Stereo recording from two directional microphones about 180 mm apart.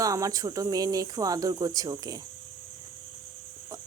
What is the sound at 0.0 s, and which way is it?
Speech, 20° right (ahead or behind).